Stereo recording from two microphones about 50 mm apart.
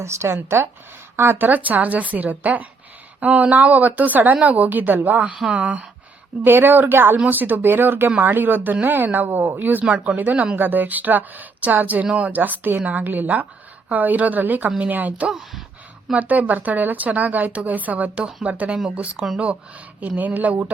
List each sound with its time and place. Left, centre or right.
0.0 s speech: right
1.5 s speech: right
6.4 s speech: right
9.8 s speech: right
10.2 s speech: right
12.4 s speech: right
15.3 s speech: centre
16.1 s speech: right